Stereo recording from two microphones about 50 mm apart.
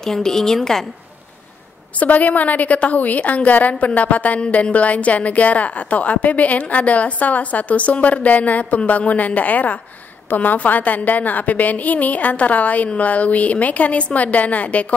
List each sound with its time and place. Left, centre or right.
0.0 s a woman's voice: centre
2.0 s a woman's voice: left